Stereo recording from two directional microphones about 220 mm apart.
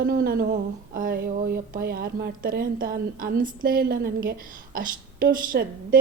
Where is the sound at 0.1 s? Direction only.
40° right (ahead or behind).